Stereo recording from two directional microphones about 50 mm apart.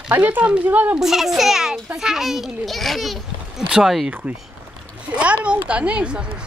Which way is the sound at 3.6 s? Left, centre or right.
Centre.